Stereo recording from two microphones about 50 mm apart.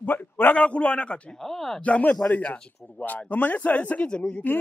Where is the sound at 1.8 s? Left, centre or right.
Left.